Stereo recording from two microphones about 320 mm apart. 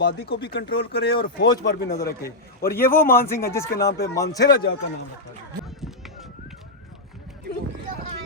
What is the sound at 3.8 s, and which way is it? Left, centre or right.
Speech, left.